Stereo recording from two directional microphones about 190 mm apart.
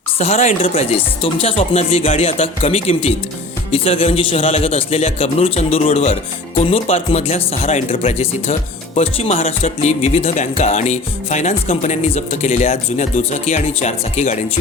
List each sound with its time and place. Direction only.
0.2 s speech: 35° left (ahead or behind)